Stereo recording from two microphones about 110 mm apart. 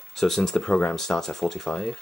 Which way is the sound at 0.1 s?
Centre (ahead or behind).